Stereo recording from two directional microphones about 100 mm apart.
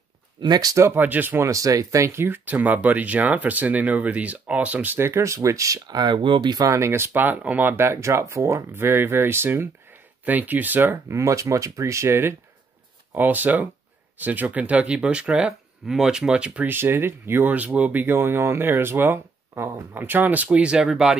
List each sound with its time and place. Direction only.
0.4 s speech: 40° right (ahead or behind)
0.8 s speech: 20° right (ahead or behind)
1.5 s speech: 35° right (ahead or behind); by 6.6 s 50° right (ahead or behind)
6.6 s speech: 30° right (ahead or behind); by 16.7 s 10° right (ahead or behind)
16.7 s speech: 20° right (ahead or behind); by 21.2 s 5° right (ahead or behind)